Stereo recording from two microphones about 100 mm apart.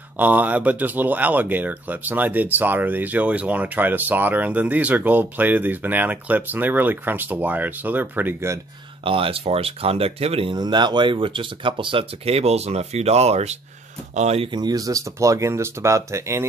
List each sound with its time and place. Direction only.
0.2 s speech: 15° right (ahead or behind)
9.0 s speech: 65° right (ahead or behind)
10.5 s speech: 45° right (ahead or behind); by 14.5 s 90° right
14.5 s speech: 40° right (ahead or behind)